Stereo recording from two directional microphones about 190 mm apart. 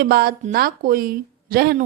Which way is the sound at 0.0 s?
55° right (ahead or behind).